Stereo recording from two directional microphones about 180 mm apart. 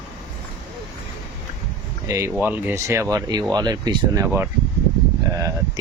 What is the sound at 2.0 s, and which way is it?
Speech, 15° right (ahead or behind).